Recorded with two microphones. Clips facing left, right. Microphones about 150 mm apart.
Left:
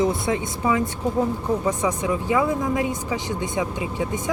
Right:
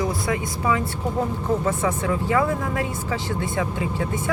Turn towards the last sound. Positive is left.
turn(degrees=15)  # may be behind; listen again after turning